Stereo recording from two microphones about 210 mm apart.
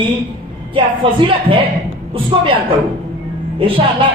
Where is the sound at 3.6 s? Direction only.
25° right (ahead or behind).